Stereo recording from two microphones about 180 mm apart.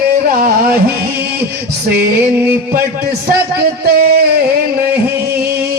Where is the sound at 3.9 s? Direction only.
50° right (ahead or behind).